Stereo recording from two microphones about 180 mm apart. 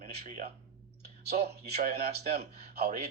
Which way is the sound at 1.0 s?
60° right (ahead or behind).